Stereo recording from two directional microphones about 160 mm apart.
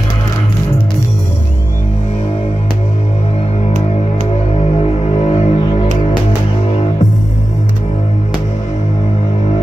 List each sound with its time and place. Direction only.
4.7 s music: 40° left (ahead or behind)